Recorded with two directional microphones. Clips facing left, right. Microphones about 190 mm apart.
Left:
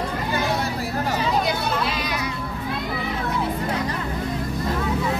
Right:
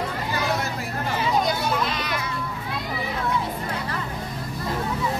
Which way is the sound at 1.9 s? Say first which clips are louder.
Left 2 dB; 10° left (ahead or behind).